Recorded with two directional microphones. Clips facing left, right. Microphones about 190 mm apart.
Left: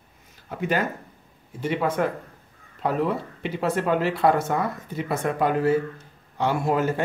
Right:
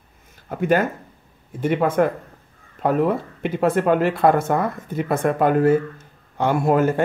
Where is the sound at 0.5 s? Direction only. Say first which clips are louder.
Right 6 dB; 50° right (ahead or behind).